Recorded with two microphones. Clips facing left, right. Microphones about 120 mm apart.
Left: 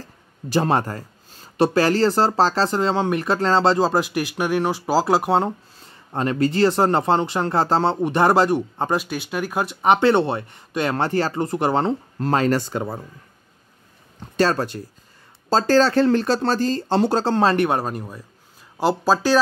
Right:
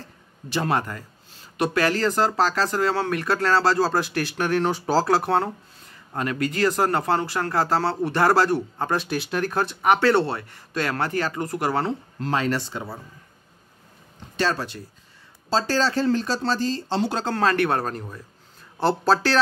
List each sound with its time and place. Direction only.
0.5 s speech: 30° left (ahead or behind); by 5.0 s 5° left (ahead or behind)
5.0 s speech: 15° left (ahead or behind)
5.9 s speech: 30° left (ahead or behind)
8.9 s speech: centre (ahead or behind)
9.8 s speech: 25° left (ahead or behind)
12.2 s speech: 40° left (ahead or behind)
14.3 s speech: 45° left (ahead or behind)
17.3 s speech: 25° left (ahead or behind)